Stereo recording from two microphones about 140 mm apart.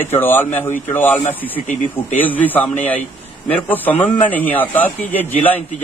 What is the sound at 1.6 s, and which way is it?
Speech, 60° left (ahead or behind).